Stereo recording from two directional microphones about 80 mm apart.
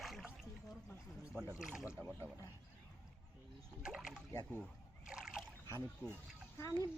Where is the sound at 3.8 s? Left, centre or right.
Centre.